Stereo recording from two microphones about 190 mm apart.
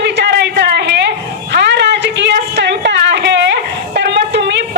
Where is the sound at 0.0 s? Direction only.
65° right (ahead or behind).